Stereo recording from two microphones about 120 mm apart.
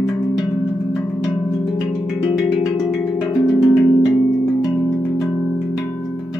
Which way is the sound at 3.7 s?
25° left (ahead or behind).